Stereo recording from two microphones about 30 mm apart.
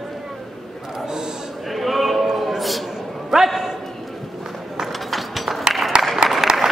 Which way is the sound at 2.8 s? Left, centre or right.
Centre.